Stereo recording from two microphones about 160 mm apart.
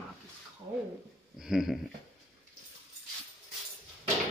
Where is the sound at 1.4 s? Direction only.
5° right (ahead or behind).